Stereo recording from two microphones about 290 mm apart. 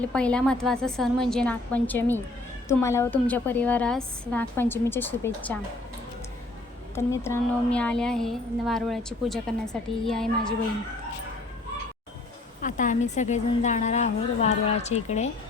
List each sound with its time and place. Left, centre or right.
0.0 s a woman's voice: centre
6.9 s a woman's voice: centre
12.6 s a woman's voice: left